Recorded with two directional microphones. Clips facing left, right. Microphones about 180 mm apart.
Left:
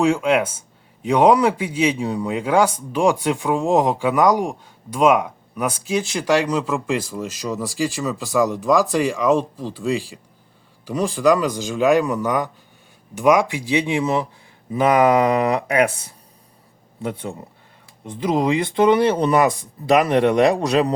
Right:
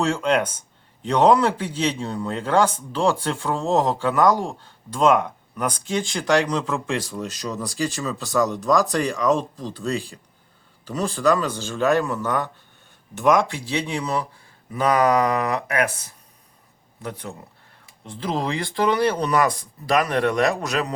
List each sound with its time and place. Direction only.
0.0 s a man's voice: 10° left (ahead or behind); by 20.9 s 30° left (ahead or behind)